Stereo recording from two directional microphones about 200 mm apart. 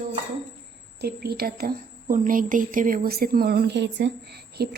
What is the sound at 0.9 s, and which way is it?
A woman's voice, 50° right (ahead or behind).